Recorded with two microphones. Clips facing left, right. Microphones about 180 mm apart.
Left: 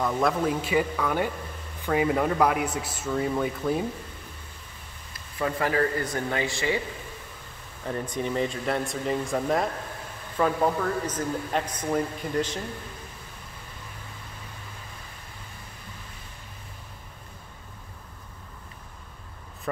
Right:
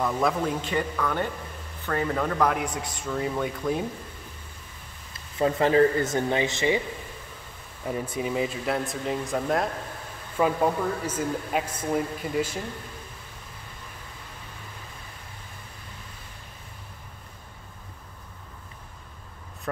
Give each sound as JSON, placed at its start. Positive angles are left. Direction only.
{"t": 0.0, "sound": "speech", "side_deg": 0}
{"t": 5.4, "sound": "speech", "side_deg": -25}
{"t": 7.8, "sound": "speech", "side_deg": -5}
{"t": 10.3, "sound": "speech", "side_deg": -10}
{"t": 11.6, "sound": "speech", "side_deg": -25}
{"t": 11.9, "sound": "speech", "side_deg": -5}